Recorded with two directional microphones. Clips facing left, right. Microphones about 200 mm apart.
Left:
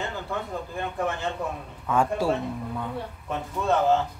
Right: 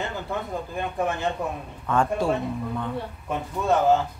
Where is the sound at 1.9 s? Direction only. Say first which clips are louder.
Right 1 dB; 5° left (ahead or behind).